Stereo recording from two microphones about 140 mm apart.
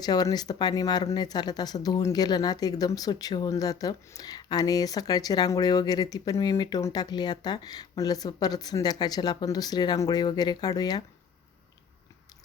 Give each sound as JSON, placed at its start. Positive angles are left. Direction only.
{"t": 0.0, "sound": "speech", "side_deg": 30}